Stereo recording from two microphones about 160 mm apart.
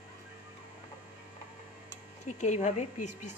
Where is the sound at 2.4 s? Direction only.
45° left (ahead or behind).